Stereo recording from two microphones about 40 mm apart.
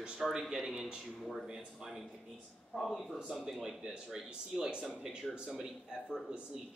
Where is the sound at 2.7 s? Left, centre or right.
Centre.